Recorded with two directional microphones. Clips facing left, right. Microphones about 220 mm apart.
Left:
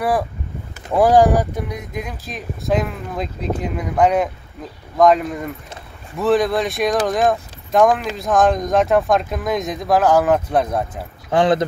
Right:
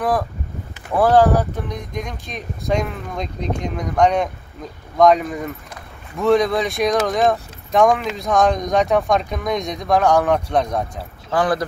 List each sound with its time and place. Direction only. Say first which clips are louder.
0.8 s speech: left 1 dB; 10° left (ahead or behind)
11.2 s speech: left 3 dB; 25° left (ahead or behind)